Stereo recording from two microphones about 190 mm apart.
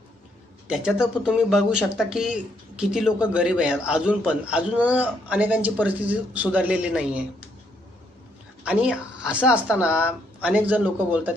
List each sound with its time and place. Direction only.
0.7 s speech: 5° right (ahead or behind)
8.6 s a woman's voice: 5° right (ahead or behind)